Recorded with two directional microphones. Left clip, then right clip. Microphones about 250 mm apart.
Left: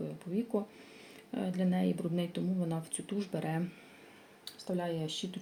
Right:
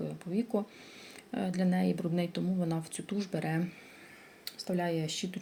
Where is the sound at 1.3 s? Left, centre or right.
Right.